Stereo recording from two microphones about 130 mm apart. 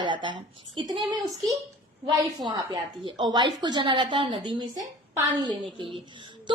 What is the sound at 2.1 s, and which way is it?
A woman's voice, 30° right (ahead or behind).